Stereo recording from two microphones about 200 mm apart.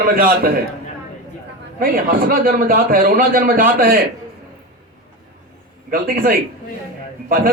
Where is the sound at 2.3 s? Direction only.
45° right (ahead or behind).